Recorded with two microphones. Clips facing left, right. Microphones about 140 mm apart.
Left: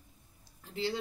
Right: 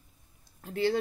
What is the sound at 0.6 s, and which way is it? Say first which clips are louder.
Speech: right 7 dB; 55° right (ahead or behind).